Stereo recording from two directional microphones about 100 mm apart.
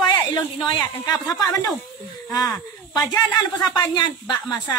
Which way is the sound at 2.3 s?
40° left (ahead or behind).